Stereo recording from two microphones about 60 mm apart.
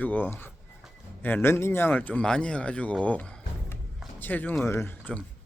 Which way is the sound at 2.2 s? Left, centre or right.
Centre.